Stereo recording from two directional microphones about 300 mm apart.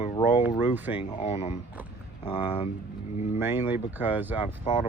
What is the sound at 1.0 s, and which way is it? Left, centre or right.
Speech, centre.